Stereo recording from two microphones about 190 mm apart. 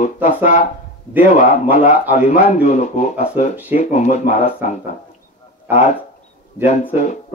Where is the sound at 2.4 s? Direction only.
40° left (ahead or behind).